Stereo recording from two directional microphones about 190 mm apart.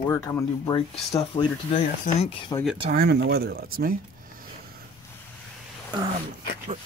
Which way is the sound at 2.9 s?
55° right (ahead or behind).